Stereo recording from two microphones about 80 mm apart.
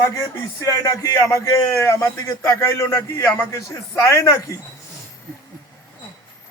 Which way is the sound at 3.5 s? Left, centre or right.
Left.